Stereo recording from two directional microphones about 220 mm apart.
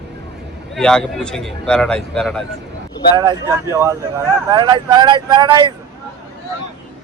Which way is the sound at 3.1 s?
15° right (ahead or behind).